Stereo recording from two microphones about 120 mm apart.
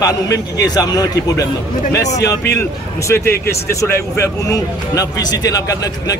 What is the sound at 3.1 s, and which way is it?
Speech, 20° left (ahead or behind).